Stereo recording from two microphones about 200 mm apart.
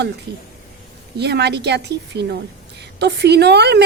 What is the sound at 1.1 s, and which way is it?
A woman's voice, 55° right (ahead or behind).